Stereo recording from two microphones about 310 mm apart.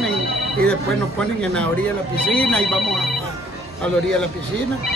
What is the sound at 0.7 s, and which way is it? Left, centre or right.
Speech, centre.